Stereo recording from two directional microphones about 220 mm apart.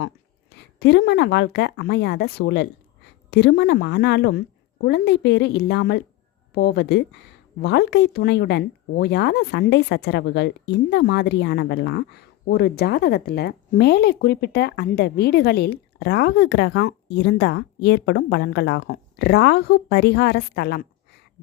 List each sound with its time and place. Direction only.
0.5 s speech: 50° left (ahead or behind)